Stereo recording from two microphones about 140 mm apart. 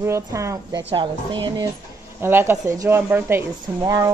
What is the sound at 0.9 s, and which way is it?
Speech, 35° right (ahead or behind).